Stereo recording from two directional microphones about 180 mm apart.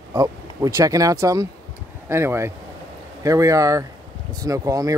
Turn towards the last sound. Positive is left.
turn(degrees=-20)  # may be behind; listen again after turning